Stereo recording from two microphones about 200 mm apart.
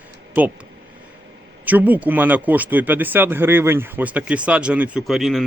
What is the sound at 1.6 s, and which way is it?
A man's voice, 10° right (ahead or behind).